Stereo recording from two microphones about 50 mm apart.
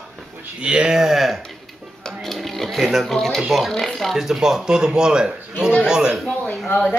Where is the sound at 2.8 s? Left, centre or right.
Centre.